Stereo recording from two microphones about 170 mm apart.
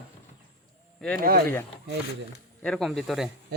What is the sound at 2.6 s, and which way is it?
Speech, centre (ahead or behind).